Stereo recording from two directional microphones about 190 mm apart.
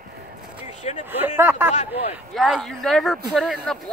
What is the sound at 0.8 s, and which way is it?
Speech, 35° left (ahead or behind).